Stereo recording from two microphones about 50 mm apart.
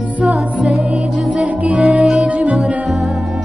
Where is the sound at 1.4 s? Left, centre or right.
Right.